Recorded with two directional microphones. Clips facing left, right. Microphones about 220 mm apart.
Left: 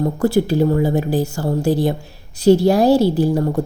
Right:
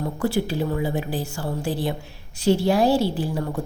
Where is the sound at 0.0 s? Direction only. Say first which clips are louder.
Left 7 dB; 40° left (ahead or behind).